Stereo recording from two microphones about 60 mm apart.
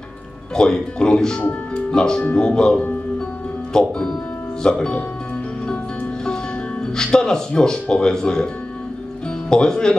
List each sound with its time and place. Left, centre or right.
0.6 s speech: centre
7.0 s speech: centre
9.5 s speech: centre